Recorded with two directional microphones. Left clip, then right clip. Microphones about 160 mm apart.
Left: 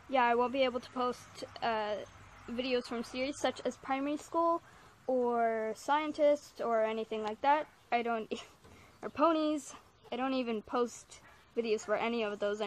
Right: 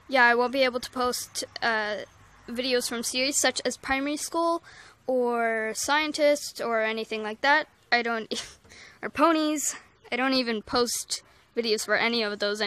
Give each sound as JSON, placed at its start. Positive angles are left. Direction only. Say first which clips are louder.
{"t": 0.1, "sound": "speech", "louder": "right 8 dB", "side_deg": -30}
{"t": 10.9, "sound": "speech", "louder": "right 19 dB", "side_deg": -20}